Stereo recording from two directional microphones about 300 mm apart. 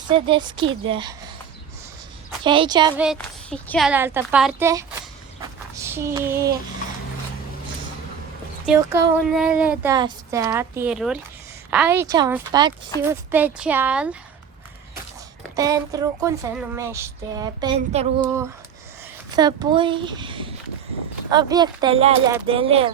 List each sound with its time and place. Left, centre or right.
0.1 s speech: centre
2.4 s speech: centre
3.0 s a woman's voice: centre
5.4 s a sound: centre
8.6 s a woman's voice: centre
15.5 s speech: centre
18.2 s speech: centre